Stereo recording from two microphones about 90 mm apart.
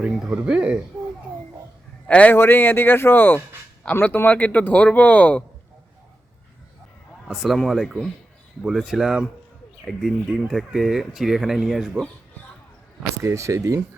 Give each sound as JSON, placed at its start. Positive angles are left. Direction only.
{"t": 0.0, "sound": "speech", "side_deg": -10}
{"t": 2.0, "sound": "a man's voice", "side_deg": 15}
{"t": 7.3, "sound": "speech", "side_deg": -5}
{"t": 13.2, "sound": "speech", "side_deg": -35}